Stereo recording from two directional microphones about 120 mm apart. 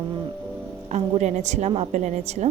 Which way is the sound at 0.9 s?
80° right.